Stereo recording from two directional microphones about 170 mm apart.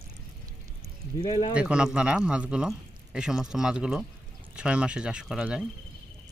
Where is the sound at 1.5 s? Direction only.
5° right (ahead or behind).